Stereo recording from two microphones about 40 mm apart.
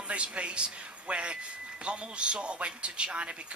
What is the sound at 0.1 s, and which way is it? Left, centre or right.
A man's voice, right.